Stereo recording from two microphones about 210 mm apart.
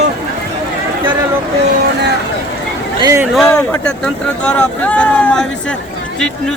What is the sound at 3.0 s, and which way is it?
Speech, 15° right (ahead or behind).